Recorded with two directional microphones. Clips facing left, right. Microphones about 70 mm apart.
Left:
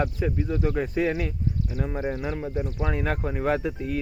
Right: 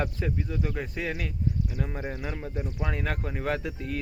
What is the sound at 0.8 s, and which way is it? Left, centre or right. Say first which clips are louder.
Speech: left 7 dB; left.